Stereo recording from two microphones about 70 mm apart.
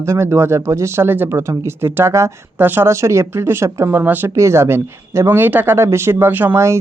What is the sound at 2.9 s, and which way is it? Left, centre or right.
Speech, right.